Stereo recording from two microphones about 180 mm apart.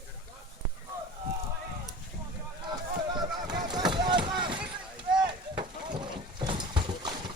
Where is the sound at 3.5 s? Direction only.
25° right (ahead or behind).